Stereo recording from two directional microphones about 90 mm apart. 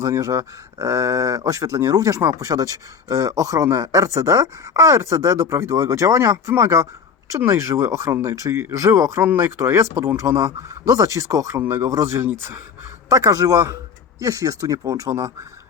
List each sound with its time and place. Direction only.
0.0 s speech: 35° right (ahead or behind)
13.1 s speech: 40° right (ahead or behind)